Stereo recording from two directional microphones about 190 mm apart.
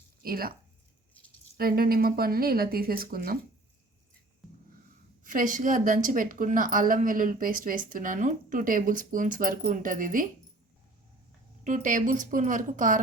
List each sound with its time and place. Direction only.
0.2 s speech: 50° right (ahead or behind)
1.5 s a woman's voice: 50° right (ahead or behind)
4.4 s a sound: centre (ahead or behind)
5.2 s a woman's voice: 45° right (ahead or behind)
11.6 s a woman's voice: 45° right (ahead or behind)